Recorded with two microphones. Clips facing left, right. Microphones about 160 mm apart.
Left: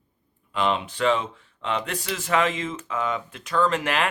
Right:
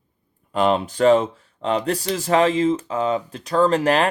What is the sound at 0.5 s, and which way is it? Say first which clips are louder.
Speech: right 6 dB; 40° right (ahead or behind).